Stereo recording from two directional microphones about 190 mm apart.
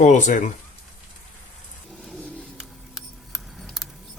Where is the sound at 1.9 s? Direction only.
5° left (ahead or behind).